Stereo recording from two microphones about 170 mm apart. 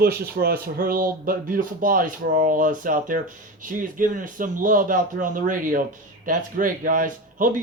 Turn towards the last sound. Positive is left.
turn(degrees=-55)  # may be behind; listen again after turning